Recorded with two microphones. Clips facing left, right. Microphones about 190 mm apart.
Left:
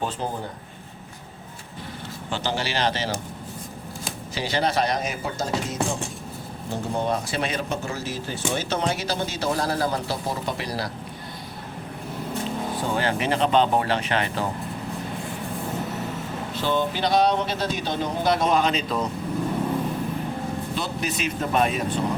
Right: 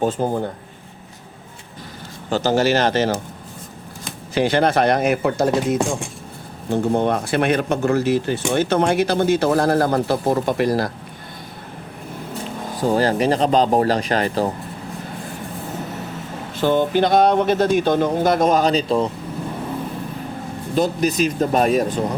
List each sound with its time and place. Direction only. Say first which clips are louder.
0.0 s speech: right 9 dB; 45° right (ahead or behind)
2.3 s speech: right 10 dB; 45° right (ahead or behind)
4.4 s speech: right 7 dB; 55° right (ahead or behind)
12.9 s speech: right 8 dB; 40° right (ahead or behind)
16.6 s speech: right 8 dB; 50° right (ahead or behind); by 19.0 s 30° right (ahead or behind)
20.7 s speech: right 15 dB; 40° right (ahead or behind)